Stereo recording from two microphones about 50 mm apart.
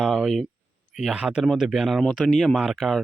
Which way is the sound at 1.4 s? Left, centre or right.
Centre.